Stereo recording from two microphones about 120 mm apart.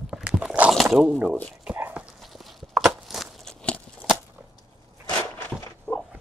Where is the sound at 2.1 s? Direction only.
Centre (ahead or behind).